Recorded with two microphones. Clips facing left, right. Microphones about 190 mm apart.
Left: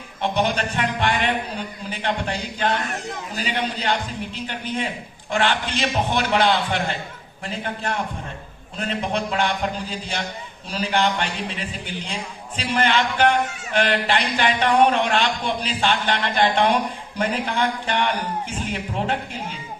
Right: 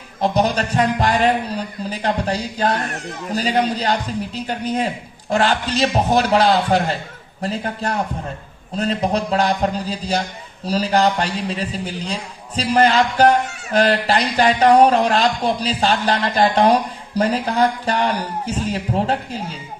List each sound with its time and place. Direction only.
0.2 s speech: 40° right (ahead or behind)